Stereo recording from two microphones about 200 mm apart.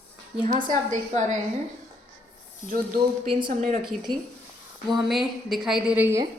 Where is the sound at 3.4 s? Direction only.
40° right (ahead or behind).